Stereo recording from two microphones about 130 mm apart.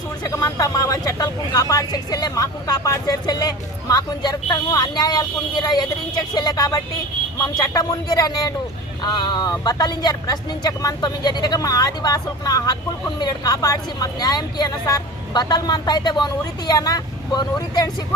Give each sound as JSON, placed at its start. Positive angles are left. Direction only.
{"t": 0.2, "sound": "speech", "side_deg": 25}